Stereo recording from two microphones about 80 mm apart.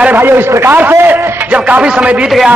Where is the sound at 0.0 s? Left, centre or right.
Right.